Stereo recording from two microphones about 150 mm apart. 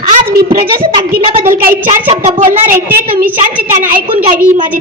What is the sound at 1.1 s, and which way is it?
Speech, 75° right (ahead or behind).